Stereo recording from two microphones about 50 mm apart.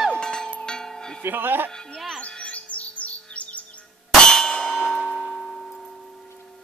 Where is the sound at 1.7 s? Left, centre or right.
Centre.